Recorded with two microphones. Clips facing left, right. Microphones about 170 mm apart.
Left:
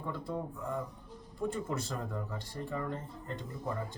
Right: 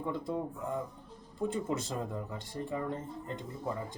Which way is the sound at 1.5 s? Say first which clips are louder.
Right 2 dB; 20° right (ahead or behind).